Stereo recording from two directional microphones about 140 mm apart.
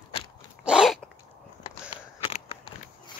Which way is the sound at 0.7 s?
5° right (ahead or behind).